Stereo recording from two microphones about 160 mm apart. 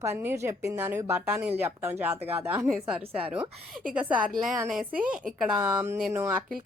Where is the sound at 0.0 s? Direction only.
15° right (ahead or behind).